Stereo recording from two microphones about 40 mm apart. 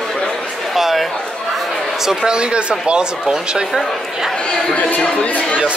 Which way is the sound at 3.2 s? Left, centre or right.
Centre.